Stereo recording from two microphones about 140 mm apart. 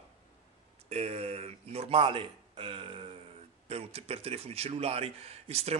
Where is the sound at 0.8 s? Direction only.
50° right (ahead or behind).